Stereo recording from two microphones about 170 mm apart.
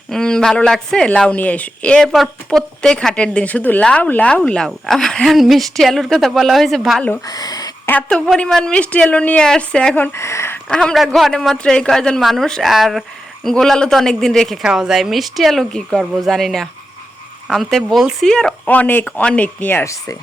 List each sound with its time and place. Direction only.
0.1 s a woman's voice: 5° left (ahead or behind)
7.3 s speech: 25° left (ahead or behind)
7.9 s speech: 5° left (ahead or behind)
10.7 s a woman's voice: 5° left (ahead or behind)